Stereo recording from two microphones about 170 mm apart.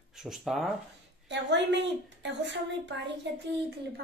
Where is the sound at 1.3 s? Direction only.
90° right.